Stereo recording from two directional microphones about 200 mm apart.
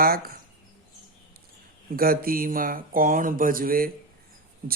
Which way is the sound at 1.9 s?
45° right (ahead or behind).